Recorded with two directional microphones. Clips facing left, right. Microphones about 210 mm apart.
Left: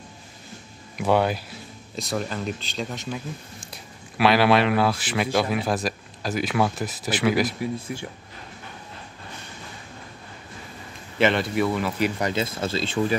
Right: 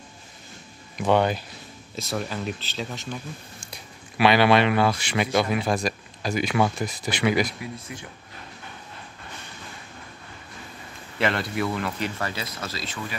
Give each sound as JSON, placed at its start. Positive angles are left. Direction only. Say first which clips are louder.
{"t": 0.9, "sound": "speech", "louder": "even", "side_deg": 5}
{"t": 11.1, "sound": "speech", "louder": "left 4 dB", "side_deg": 0}
{"t": 12.2, "sound": "speech", "louder": "left 6 dB", "side_deg": 20}